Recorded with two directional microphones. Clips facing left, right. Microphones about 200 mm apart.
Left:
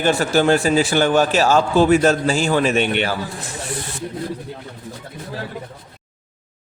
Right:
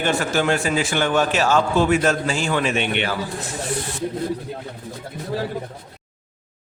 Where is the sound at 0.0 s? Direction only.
35° left (ahead or behind).